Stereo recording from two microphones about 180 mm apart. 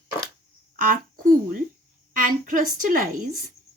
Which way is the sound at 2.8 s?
50° right (ahead or behind).